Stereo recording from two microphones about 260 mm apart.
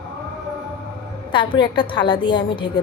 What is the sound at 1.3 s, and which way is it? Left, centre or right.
A woman's voice, centre.